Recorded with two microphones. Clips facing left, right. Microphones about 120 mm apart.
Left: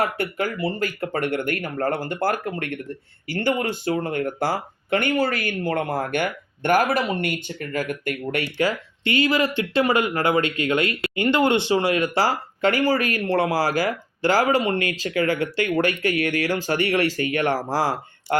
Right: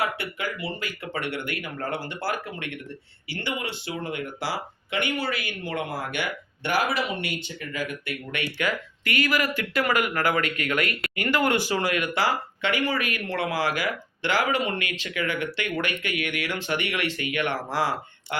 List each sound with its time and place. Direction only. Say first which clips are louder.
0.0 s speech: left 5 dB; 45° left (ahead or behind)
8.5 s speech: left 5 dB; 30° left (ahead or behind)